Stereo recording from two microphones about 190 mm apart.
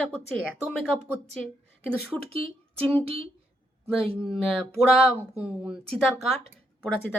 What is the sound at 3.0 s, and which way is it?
Speech, 30° right (ahead or behind).